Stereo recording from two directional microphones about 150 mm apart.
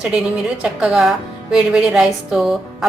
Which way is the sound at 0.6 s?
5° right (ahead or behind).